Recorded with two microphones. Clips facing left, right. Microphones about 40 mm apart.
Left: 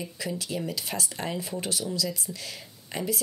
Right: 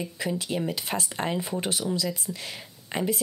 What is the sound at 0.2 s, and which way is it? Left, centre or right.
Speech, right.